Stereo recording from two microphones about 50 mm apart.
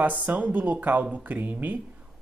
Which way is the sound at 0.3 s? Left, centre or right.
Right.